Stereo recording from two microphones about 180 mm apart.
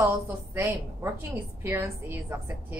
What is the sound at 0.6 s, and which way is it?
A woman's voice, 15° right (ahead or behind).